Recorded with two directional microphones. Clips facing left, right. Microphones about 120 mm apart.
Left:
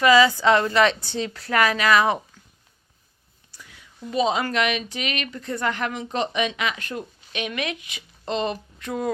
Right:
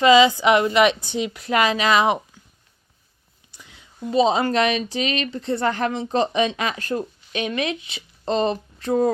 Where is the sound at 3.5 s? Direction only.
20° right (ahead or behind).